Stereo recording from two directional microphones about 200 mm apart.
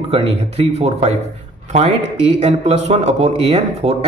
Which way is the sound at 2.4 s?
35° right (ahead or behind).